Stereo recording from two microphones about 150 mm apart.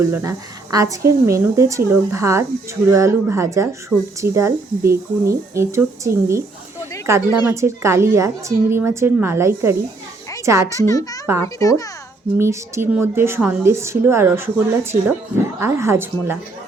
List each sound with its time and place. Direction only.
0.0 s a woman's voice: 15° right (ahead or behind)
10.8 s a child's voice: 25° left (ahead or behind)
12.4 s a woman's voice: 20° right (ahead or behind)
15.6 s a woman's voice: 15° right (ahead or behind)